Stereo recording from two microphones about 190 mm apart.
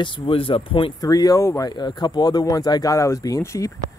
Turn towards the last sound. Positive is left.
turn(degrees=15)  # may be behind; listen again after turning